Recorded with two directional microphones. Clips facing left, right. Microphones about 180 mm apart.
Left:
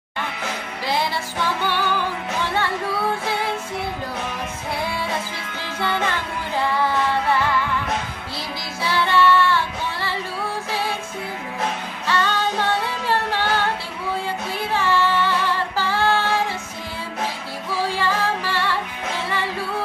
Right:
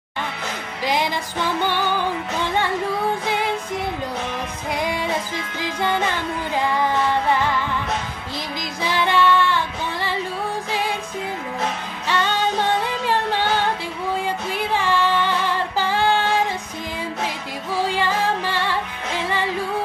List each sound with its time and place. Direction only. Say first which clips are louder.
0.8 s music: right 2 dB; 15° right (ahead or behind)
5.6 s music: right 2 dB; 15° right (ahead or behind)
8.8 s music: even; 15° right (ahead or behind)
10.7 s music: right 1 dB; 15° right (ahead or behind)
12.1 s music: right 1 dB; 15° right (ahead or behind)
14.2 s female singing: right 2 dB; 15° right (ahead or behind)
17.8 s music: right 1 dB; 15° right (ahead or behind)